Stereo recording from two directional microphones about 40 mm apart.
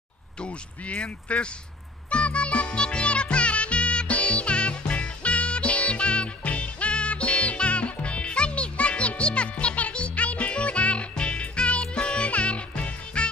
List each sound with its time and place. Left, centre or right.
0.4 s speech: left
2.0 s music: left